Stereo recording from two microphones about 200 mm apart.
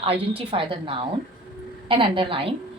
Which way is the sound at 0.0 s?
25° right (ahead or behind).